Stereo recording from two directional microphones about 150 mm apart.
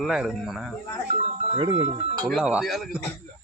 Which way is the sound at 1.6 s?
35° right (ahead or behind).